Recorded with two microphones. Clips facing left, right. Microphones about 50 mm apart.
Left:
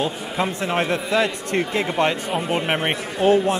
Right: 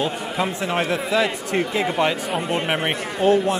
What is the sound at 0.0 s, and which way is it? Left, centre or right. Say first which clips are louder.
A man's voice: even; centre.